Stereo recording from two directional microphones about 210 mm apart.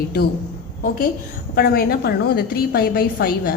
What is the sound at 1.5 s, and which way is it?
A woman's voice, 45° left (ahead or behind).